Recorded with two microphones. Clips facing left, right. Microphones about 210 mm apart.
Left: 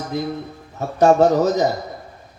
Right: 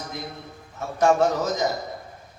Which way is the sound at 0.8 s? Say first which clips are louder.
Left 6 dB; 35° left (ahead or behind).